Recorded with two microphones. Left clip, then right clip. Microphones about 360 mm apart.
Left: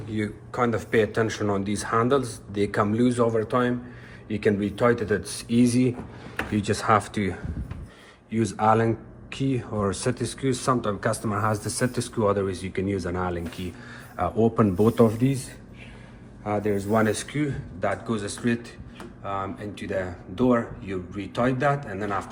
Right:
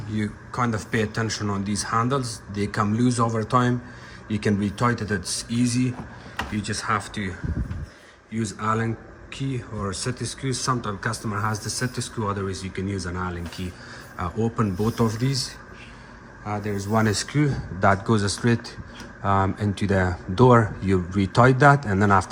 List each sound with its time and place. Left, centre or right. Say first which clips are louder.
0.2 s speech: left 1 dB; centre
8.3 s speech: left 5 dB; centre